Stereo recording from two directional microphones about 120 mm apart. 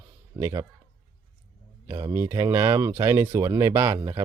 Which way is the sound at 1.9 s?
30° right (ahead or behind).